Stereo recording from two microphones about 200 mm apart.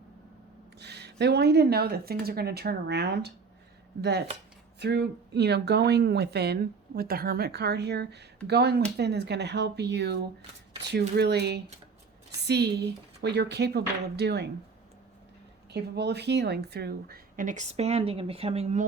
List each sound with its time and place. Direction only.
0.8 s speech: 55° right (ahead or behind)
4.8 s speech: 55° right (ahead or behind)
15.7 s a woman's voice: 55° right (ahead or behind); by 18.9 s 35° right (ahead or behind)